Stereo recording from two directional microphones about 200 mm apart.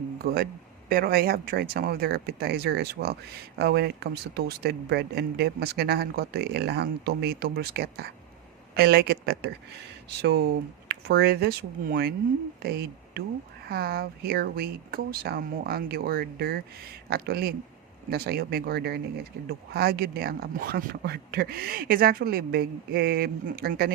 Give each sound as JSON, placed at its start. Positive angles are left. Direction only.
{"t": 0.2, "sound": "a man's voice", "side_deg": -50}